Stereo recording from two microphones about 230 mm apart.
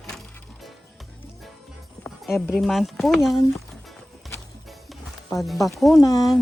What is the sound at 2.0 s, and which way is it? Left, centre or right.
Speech, centre.